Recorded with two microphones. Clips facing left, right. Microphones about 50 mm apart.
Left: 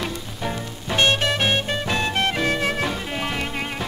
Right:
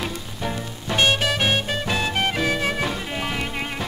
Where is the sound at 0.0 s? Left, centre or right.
Centre.